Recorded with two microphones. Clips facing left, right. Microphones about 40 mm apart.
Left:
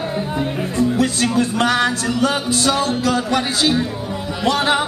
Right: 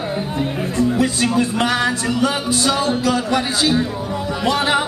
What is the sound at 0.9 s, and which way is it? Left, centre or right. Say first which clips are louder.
Music: even; centre.